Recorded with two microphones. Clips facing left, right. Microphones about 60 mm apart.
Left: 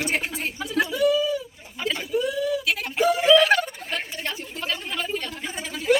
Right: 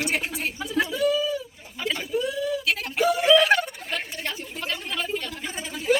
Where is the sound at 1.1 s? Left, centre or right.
Centre.